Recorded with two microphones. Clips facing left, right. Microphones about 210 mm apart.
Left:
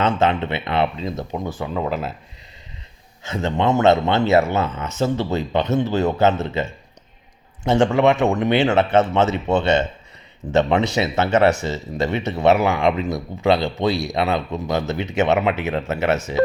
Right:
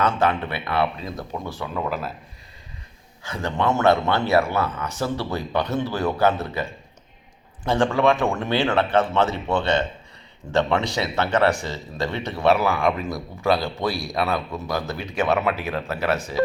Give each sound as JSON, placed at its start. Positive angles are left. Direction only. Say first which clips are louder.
{"t": 0.0, "sound": "speech", "louder": "left 3 dB", "side_deg": 25}
{"t": 3.2, "sound": "speech", "louder": "left 3 dB", "side_deg": 25}